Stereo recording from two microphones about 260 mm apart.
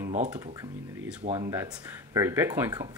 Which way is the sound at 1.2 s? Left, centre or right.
Right.